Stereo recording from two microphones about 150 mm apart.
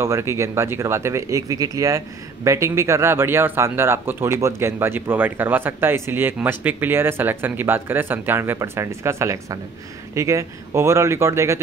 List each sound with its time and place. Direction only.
0.0 s speech: 20° right (ahead or behind)